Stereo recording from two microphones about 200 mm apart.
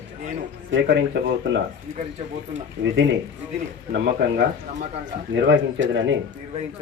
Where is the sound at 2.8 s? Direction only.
65° right (ahead or behind).